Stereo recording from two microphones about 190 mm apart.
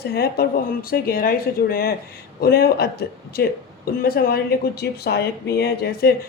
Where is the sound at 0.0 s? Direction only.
55° left (ahead or behind).